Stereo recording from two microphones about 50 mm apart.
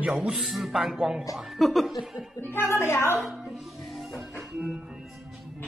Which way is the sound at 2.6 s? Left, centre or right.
Left.